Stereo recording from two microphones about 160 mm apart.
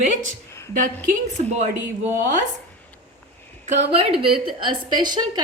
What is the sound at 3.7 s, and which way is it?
A woman's voice, 40° right (ahead or behind).